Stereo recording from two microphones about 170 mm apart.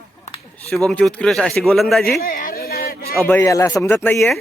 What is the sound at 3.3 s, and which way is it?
Speech, 20° left (ahead or behind).